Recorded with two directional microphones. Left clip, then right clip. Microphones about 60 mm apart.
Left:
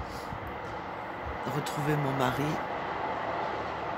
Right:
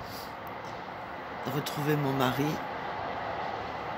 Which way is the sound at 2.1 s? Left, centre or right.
Right.